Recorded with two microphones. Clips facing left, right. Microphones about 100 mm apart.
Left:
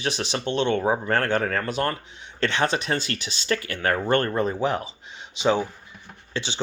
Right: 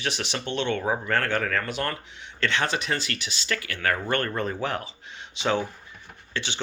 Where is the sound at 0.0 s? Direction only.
35° left (ahead or behind).